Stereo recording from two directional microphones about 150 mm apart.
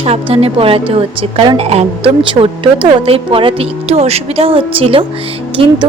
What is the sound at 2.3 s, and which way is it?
Speech, 30° right (ahead or behind).